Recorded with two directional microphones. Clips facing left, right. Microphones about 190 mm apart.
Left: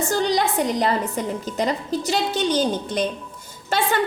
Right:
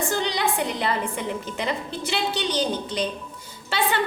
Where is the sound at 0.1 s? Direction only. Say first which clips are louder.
Left 4 dB; 45° left (ahead or behind).